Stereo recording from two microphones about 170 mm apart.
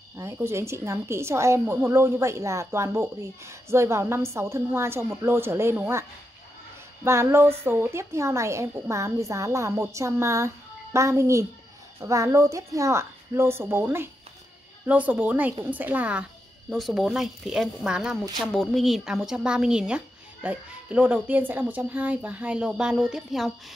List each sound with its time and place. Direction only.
0.2 s a woman's voice: 15° right (ahead or behind)
7.1 s a woman's voice: 15° right (ahead or behind)